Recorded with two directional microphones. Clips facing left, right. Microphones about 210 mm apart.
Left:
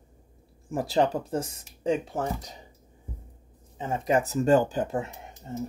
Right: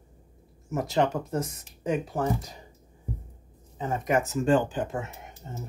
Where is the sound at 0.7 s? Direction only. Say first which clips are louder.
Left 1 dB; 30° left (ahead or behind).